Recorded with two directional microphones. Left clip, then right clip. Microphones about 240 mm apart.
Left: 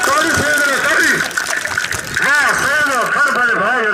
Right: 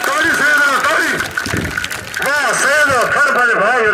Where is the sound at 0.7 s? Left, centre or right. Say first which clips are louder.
Left 1 dB; right.